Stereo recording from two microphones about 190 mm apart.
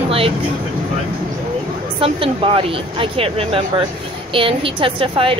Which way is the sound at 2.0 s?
30° right (ahead or behind).